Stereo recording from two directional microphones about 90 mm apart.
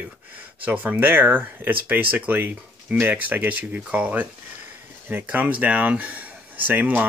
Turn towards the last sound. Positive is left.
turn(degrees=-20)  # may be behind; listen again after turning